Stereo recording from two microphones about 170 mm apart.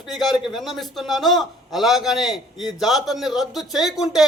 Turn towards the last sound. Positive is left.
turn(degrees=0)  # may be behind; listen again after turning